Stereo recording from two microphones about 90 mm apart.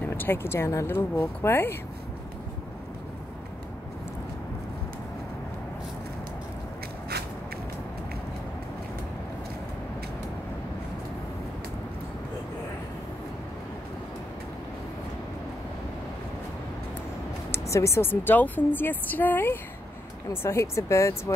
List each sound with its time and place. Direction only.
0.1 s a woman's voice: 25° left (ahead or behind)
17.5 s a woman's voice: 35° left (ahead or behind)